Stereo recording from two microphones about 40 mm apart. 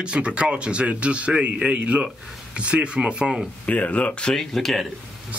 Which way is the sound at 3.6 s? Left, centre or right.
Left.